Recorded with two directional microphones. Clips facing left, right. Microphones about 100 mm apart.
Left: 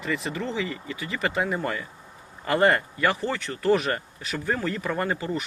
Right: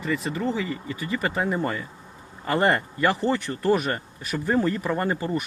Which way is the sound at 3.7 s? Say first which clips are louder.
Left 1 dB; 5° right (ahead or behind).